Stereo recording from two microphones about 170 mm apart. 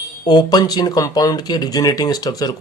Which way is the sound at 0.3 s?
25° left (ahead or behind).